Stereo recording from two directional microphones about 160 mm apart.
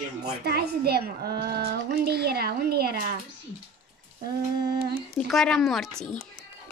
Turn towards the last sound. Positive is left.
turn(degrees=0)  # may be behind; listen again after turning